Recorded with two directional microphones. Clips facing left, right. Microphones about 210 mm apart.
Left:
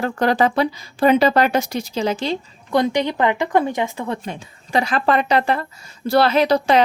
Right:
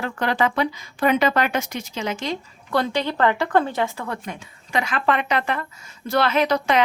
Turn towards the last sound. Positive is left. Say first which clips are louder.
# left 4 dB
turn(degrees=35)  # may be behind; listen again after turning